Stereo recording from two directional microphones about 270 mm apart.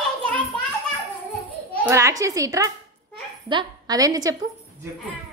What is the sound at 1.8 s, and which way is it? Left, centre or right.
A child's voice, centre.